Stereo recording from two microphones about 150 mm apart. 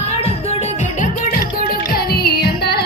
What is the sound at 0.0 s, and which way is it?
Music, 45° left (ahead or behind).